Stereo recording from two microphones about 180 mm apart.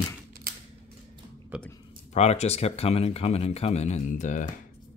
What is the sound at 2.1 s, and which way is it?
Speech, 35° left (ahead or behind).